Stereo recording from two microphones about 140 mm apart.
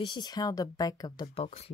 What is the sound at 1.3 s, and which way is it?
Speech, 45° left (ahead or behind).